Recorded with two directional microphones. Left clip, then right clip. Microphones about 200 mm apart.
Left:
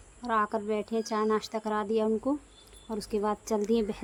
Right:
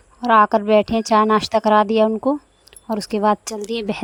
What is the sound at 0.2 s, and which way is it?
A woman's voice, 40° right (ahead or behind).